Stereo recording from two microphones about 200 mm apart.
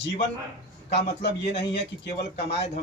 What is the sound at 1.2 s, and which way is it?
Speech, 55° left (ahead or behind).